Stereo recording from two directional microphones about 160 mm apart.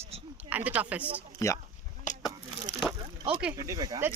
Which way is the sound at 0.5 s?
10° right (ahead or behind).